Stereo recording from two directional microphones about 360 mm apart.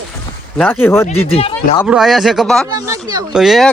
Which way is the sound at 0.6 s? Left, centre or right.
Centre.